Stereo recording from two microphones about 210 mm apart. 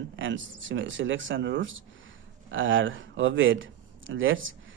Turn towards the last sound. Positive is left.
turn(degrees=-65)  # may be behind; listen again after turning